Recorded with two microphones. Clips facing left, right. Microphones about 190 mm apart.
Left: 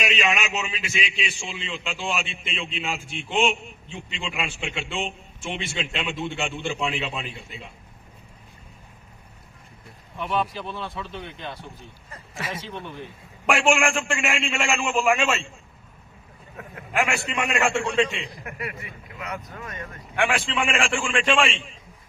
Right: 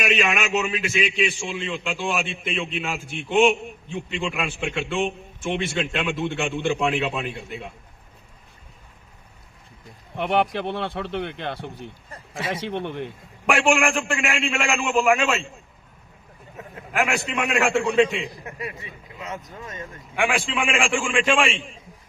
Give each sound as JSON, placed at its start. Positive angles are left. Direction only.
{"t": 0.3, "sound": "a man's voice", "side_deg": -55}
{"t": 10.2, "sound": "speech", "side_deg": -70}
{"t": 12.1, "sound": "speech", "side_deg": -30}
{"t": 12.5, "sound": "speech", "side_deg": -65}
{"t": 13.5, "sound": "a man's voice", "side_deg": 0}
{"t": 16.6, "sound": "speech", "side_deg": -20}
{"t": 16.9, "sound": "a man's voice", "side_deg": 0}
{"t": 18.4, "sound": "speech", "side_deg": -20}
{"t": 20.1, "sound": "a man's voice", "side_deg": 0}